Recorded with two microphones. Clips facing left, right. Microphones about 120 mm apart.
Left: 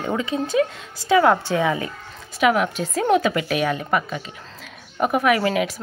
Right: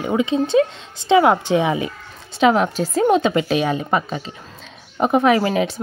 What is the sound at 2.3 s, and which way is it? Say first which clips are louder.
A woman's voice: right 3 dB; 30° right (ahead or behind).